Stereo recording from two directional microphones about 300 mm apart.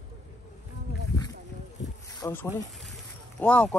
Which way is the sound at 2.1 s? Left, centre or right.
Centre.